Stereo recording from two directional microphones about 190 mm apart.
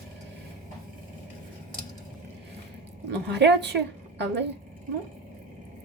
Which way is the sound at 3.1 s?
65° right (ahead or behind).